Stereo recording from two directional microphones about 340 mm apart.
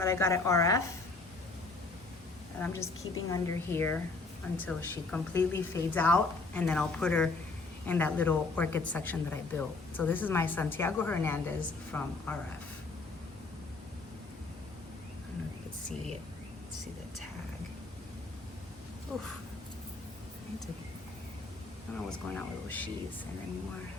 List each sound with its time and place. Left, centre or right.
0.0 s a woman's voice: centre
2.6 s a woman's voice: centre
22.3 s a woman's voice: centre